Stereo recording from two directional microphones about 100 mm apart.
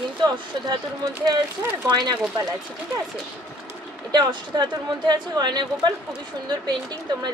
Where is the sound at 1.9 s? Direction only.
45° right (ahead or behind).